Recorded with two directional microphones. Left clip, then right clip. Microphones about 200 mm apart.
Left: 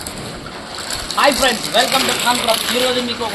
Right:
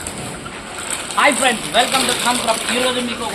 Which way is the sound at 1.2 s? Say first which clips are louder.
Left 1 dB; 10° left (ahead or behind).